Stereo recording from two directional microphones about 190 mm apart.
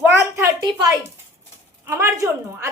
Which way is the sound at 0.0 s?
15° right (ahead or behind).